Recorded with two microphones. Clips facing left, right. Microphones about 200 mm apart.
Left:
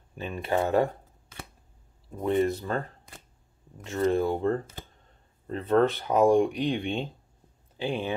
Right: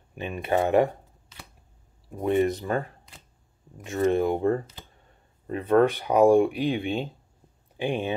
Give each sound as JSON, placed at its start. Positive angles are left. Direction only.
{"t": 0.1, "sound": "speech", "side_deg": -15}
{"t": 2.0, "sound": "speech", "side_deg": -15}
{"t": 7.7, "sound": "speech", "side_deg": -15}